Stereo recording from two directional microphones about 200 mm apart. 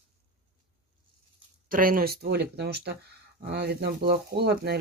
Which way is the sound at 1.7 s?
45° right (ahead or behind).